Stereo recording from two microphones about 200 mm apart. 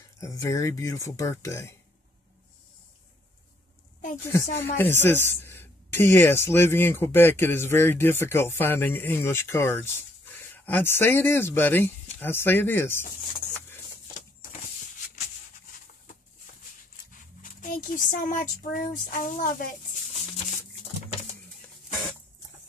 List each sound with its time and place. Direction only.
0.2 s a woman's voice: 15° left (ahead or behind)
4.3 s a woman's voice: 15° left (ahead or behind)
17.4 s speech: 40° left (ahead or behind)